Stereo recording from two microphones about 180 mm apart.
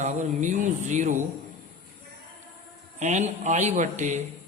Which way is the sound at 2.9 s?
40° right (ahead or behind).